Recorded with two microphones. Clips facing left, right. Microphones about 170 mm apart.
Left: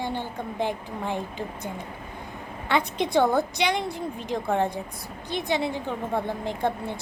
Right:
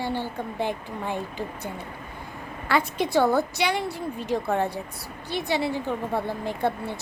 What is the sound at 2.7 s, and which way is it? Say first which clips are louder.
Speech: even; 5° right (ahead or behind).